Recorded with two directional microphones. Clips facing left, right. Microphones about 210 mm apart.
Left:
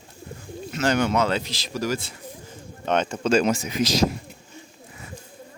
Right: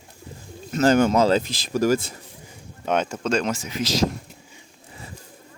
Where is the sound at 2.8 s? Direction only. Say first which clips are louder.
Even; 10° right (ahead or behind).